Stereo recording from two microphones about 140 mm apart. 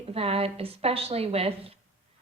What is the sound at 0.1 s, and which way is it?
A woman's voice, 45° right (ahead or behind).